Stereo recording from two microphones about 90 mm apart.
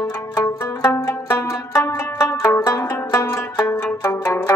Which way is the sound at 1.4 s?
35° left (ahead or behind).